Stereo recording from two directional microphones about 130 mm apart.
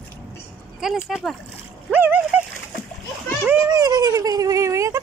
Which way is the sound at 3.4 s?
20° right (ahead or behind).